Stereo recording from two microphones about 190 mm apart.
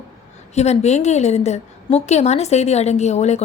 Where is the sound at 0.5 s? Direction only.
35° left (ahead or behind).